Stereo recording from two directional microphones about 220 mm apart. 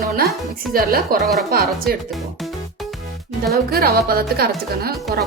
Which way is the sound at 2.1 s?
Centre (ahead or behind).